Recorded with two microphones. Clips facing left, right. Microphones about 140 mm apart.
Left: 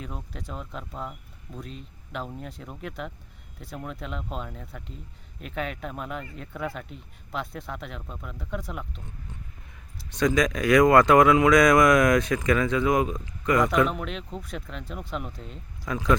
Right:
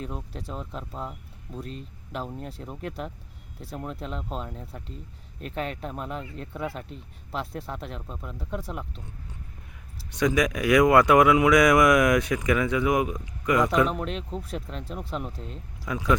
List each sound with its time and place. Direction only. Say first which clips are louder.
0.8 s speech: right 1 dB; centre (ahead or behind)
2.4 s speech: right 2 dB; 35° right (ahead or behind)
4.2 s speech: right 1 dB; centre (ahead or behind)
4.5 s speech: right 1 dB; 30° right (ahead or behind)
10.1 s speech: even; 10° right (ahead or behind)
14.2 s speech: right 3 dB; centre (ahead or behind)
14.4 s speech: right 2 dB; 35° right (ahead or behind)
15.8 s speech: left 1 dB; 10° right (ahead or behind)